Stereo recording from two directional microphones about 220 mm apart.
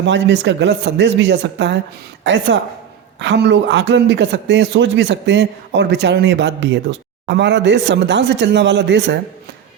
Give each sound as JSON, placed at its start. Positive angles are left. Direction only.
{"t": 0.0, "sound": "a man's voice", "side_deg": -55}